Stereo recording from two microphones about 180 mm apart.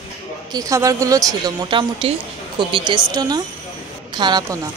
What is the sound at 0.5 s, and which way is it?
A woman's voice, 20° right (ahead or behind).